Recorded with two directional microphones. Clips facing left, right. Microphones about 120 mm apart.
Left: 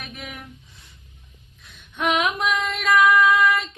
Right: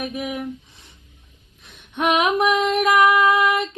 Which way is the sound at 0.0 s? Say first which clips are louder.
Right 11 dB; 15° right (ahead or behind).